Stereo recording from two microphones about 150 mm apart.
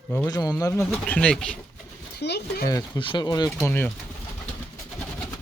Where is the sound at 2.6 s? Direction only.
25° left (ahead or behind).